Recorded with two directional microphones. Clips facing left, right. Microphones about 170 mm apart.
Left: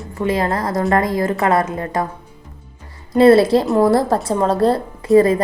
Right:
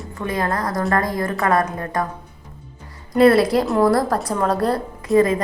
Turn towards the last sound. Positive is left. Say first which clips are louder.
# left 4 dB
turn(degrees=35)  # may be behind; listen again after turning